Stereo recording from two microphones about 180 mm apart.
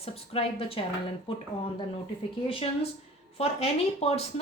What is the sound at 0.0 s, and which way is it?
Speech, 35° left (ahead or behind).